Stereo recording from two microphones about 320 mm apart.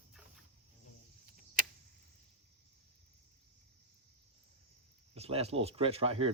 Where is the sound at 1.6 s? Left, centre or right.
Right.